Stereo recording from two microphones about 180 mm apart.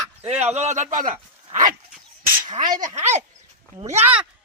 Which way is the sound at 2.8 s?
40° right (ahead or behind).